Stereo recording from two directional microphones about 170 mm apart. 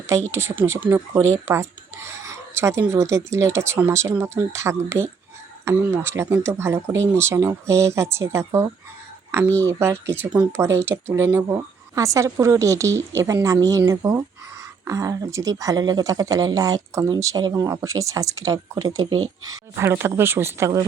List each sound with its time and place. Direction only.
0.1 s a woman's voice: 15° right (ahead or behind)